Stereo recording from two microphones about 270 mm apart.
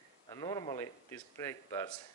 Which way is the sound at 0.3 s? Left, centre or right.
Centre.